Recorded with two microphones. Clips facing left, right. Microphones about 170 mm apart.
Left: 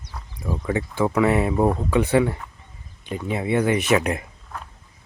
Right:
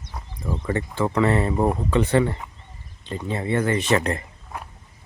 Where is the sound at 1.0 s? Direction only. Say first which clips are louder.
Left 1 dB; 10° left (ahead or behind).